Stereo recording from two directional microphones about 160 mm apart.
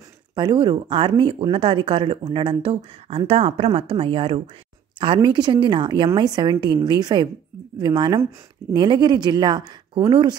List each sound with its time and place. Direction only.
0.4 s a woman's voice: 30° right (ahead or behind)